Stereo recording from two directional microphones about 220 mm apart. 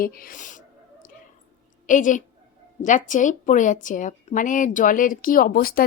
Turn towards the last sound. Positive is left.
turn(degrees=40)  # may be behind; listen again after turning